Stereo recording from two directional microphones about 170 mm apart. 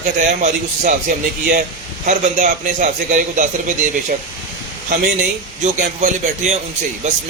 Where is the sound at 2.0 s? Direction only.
45° right (ahead or behind).